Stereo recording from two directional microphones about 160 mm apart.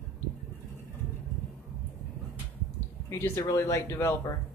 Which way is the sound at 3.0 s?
15° left (ahead or behind).